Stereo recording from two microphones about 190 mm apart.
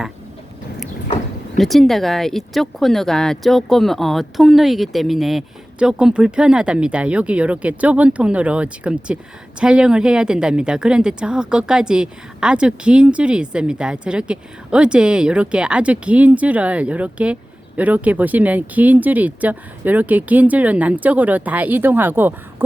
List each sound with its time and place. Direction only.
1.5 s speech: centre (ahead or behind)